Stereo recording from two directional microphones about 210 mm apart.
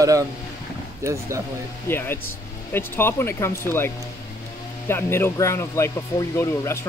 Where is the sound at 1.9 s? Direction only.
10° left (ahead or behind).